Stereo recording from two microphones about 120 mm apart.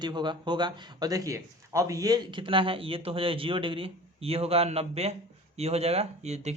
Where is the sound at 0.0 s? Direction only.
40° right (ahead or behind).